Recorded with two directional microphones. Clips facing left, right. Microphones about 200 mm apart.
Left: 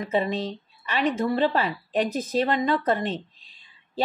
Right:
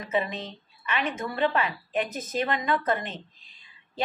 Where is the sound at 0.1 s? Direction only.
30° left (ahead or behind).